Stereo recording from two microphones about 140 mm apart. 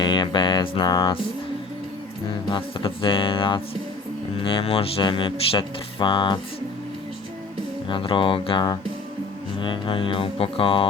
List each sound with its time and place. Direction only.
0.0 s music: 35° left (ahead or behind)
2.5 s speech: 40° left (ahead or behind)
7.9 s speech: 35° left (ahead or behind)